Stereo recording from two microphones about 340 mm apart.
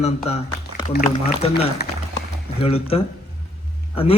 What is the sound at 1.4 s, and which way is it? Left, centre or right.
A man's voice, centre.